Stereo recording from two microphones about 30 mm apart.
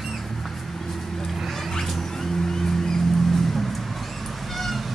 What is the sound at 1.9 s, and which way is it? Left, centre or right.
Vehicle, centre.